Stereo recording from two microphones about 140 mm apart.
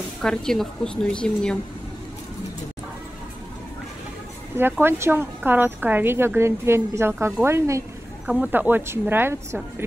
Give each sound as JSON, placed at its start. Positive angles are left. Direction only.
{"t": 0.2, "sound": "a woman's voice", "side_deg": 5}
{"t": 4.6, "sound": "speech", "side_deg": -15}